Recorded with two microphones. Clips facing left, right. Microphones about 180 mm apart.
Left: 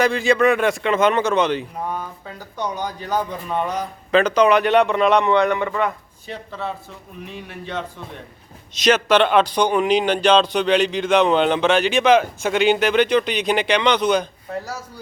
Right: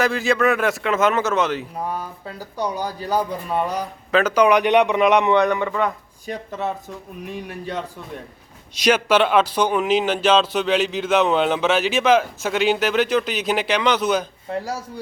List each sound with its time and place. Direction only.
0.0 s a man's voice: centre (ahead or behind)
5.6 s a man's voice: centre (ahead or behind)
6.3 s a man's voice: 20° right (ahead or behind)
8.7 s a man's voice: 10° right (ahead or behind)